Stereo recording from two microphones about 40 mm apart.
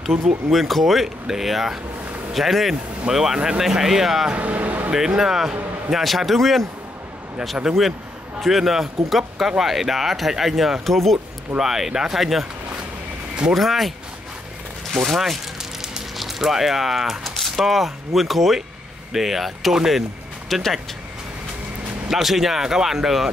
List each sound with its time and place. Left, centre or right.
0.5 s speech: centre
3.3 s speech: centre
3.7 s speech: centre
4.3 s a sound: right
4.9 s speech: centre
7.7 s speech: centre
11.5 s speech: centre
13.6 s speech: centre
15.0 s speech: centre
19.9 s music: centre
22.0 s speech: centre